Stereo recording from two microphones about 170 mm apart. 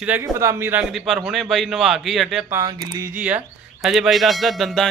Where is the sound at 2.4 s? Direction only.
20° right (ahead or behind); by 4.8 s centre (ahead or behind).